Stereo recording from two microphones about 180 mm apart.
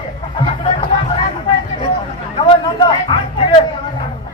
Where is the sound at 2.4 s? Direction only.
25° left (ahead or behind).